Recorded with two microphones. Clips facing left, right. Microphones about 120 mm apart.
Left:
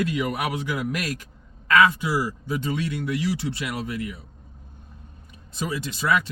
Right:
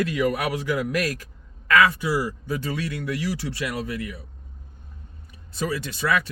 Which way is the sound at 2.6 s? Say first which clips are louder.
Left 3 dB; 20° left (ahead or behind).